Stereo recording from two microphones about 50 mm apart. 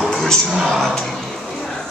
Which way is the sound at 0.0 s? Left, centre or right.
Centre.